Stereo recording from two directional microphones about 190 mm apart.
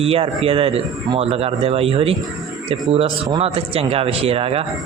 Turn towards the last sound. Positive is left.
turn(degrees=-30)  # may be behind; listen again after turning